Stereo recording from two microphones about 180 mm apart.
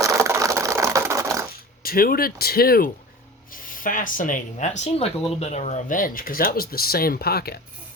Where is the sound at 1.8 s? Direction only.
55° left (ahead or behind).